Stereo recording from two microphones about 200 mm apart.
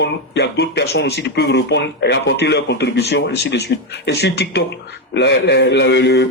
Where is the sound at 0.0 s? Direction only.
60° left (ahead or behind).